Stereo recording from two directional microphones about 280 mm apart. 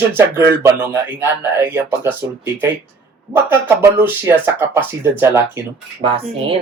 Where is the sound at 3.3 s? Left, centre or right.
Centre.